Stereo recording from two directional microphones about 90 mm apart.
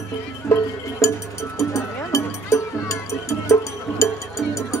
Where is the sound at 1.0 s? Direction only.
35° left (ahead or behind).